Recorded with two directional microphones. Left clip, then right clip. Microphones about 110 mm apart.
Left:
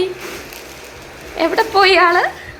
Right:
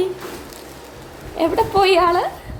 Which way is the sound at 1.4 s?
15° right (ahead or behind).